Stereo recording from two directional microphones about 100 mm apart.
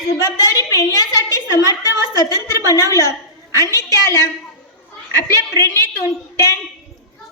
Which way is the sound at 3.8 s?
25° left (ahead or behind).